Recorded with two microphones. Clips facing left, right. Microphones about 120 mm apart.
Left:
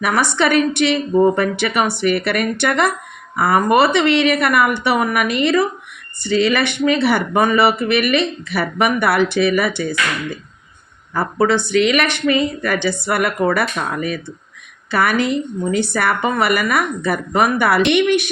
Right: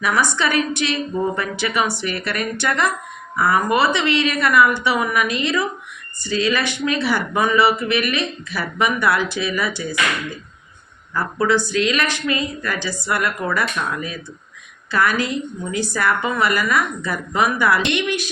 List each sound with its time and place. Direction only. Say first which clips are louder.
0.0 s speech: left 3 dB; 60° left (ahead or behind)
11.1 s speech: left 3 dB; 65° left (ahead or behind)